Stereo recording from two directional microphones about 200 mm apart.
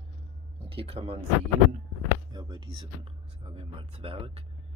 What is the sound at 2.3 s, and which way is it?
Speech, 20° right (ahead or behind).